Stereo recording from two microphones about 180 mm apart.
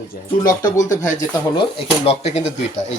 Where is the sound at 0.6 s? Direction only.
45° left (ahead or behind).